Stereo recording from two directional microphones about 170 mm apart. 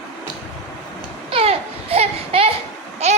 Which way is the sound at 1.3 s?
35° right (ahead or behind).